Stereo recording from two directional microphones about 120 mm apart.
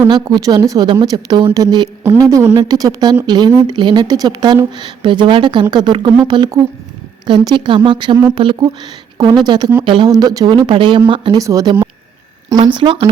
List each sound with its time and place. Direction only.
0.1 s speech: 35° right (ahead or behind)
9.8 s speech: 45° right (ahead or behind)
10.1 s speech: 30° right (ahead or behind)
11.3 s speech: 30° right (ahead or behind)
12.6 s speech: 45° right (ahead or behind)